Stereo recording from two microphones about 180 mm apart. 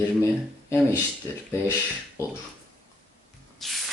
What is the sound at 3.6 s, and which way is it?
Spray, centre (ahead or behind).